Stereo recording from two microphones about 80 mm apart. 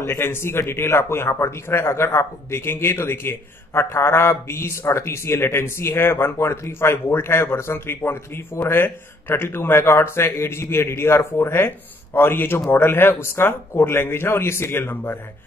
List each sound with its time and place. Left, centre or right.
0.0 s a man's voice: left